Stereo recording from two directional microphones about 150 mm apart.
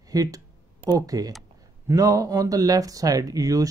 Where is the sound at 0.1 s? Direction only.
25° right (ahead or behind).